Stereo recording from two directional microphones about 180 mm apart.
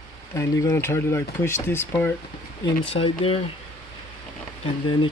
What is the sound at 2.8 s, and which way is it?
Speech, 30° left (ahead or behind).